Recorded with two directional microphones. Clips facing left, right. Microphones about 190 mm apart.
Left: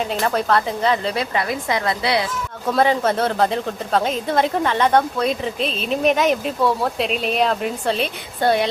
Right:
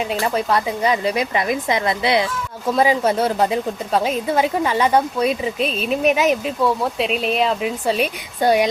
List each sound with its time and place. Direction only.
0.2 s a woman's voice: 10° right (ahead or behind)
2.7 s a woman's voice: 10° right (ahead or behind)